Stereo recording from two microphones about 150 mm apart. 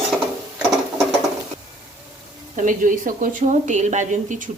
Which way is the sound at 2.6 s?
60° right (ahead or behind).